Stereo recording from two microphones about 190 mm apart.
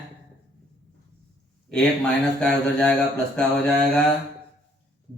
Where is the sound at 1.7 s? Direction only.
5° left (ahead or behind).